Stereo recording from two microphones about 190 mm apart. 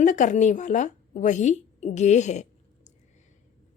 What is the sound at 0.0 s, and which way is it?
A woman's voice, 40° left (ahead or behind).